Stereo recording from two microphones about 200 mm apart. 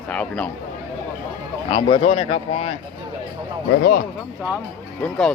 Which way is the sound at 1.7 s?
25° left (ahead or behind).